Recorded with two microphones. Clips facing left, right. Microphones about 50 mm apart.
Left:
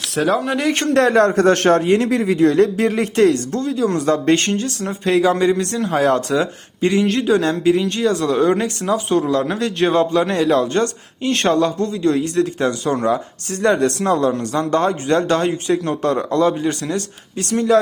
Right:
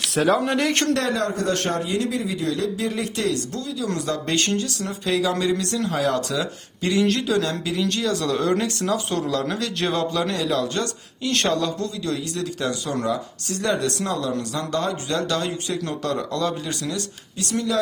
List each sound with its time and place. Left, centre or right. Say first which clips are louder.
0.1 s speech: left 2 dB; centre
0.9 s a man's voice: left 10 dB; left